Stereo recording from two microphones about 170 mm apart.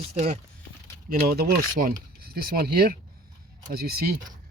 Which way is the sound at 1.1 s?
60° right (ahead or behind).